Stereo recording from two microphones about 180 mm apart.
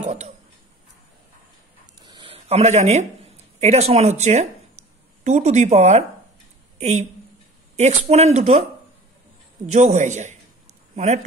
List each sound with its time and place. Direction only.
0.0 s a sound: 40° right (ahead or behind)
2.0 s speech: 30° right (ahead or behind)
9.7 s speech: 40° right (ahead or behind)